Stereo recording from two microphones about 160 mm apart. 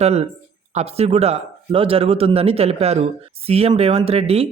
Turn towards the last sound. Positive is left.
turn(degrees=-40)  # may be behind; listen again after turning